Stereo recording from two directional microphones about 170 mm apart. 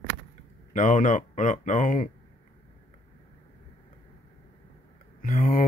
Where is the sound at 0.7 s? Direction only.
50° left (ahead or behind).